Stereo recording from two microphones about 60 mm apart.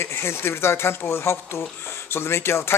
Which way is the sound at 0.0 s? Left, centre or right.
Left.